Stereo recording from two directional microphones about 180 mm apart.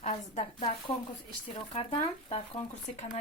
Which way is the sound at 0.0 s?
35° left (ahead or behind).